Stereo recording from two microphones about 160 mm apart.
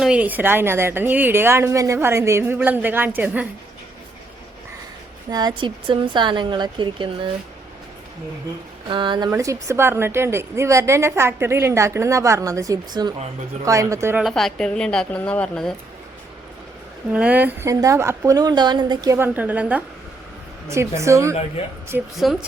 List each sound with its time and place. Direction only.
0.0 s a woman's voice: 5° right (ahead or behind)
5.3 s speech: 25° right (ahead or behind)
8.9 s a woman's voice: 30° right (ahead or behind)
14.3 s a woman's voice: centre (ahead or behind)
17.1 s a woman's voice: 10° right (ahead or behind)
21.6 s speech: 40° left (ahead or behind)
22.2 s a woman's voice: centre (ahead or behind)